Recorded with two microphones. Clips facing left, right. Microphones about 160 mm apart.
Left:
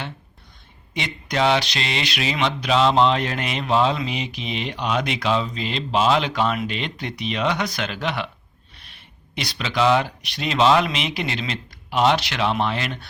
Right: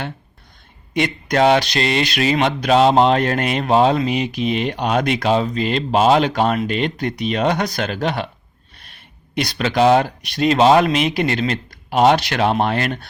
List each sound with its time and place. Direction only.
0.9 s speech: 50° right (ahead or behind)